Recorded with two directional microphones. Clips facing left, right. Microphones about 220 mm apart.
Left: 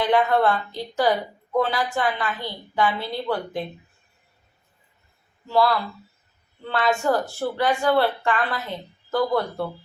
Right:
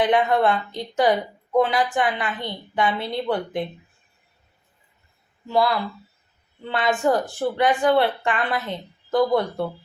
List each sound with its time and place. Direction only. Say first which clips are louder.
0.0 s a woman's voice: right 1 dB; 20° right (ahead or behind)
5.5 s a woman's voice: even; 20° right (ahead or behind)